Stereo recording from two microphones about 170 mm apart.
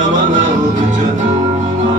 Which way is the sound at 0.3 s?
50° right (ahead or behind).